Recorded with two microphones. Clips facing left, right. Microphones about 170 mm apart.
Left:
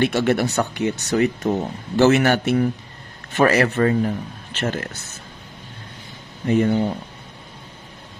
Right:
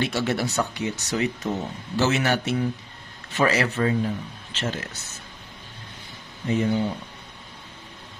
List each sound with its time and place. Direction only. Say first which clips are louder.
0.0 s a man's voice: left 6 dB; 55° left (ahead or behind)
6.4 s a man's voice: left 5 dB; 55° left (ahead or behind)